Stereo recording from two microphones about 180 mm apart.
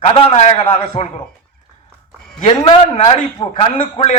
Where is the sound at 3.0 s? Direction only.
30° left (ahead or behind).